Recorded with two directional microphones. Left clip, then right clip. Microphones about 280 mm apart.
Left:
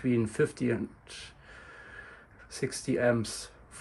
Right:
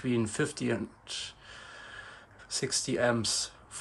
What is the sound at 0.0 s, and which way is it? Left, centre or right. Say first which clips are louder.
Speech: left 3 dB; centre.